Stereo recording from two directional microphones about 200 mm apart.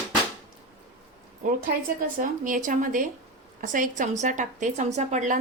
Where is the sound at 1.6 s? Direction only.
45° right (ahead or behind).